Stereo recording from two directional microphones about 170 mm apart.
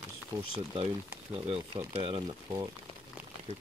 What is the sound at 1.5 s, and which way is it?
Speech, 30° right (ahead or behind).